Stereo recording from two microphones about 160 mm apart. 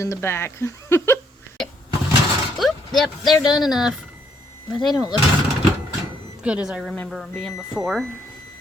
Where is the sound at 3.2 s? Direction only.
25° left (ahead or behind).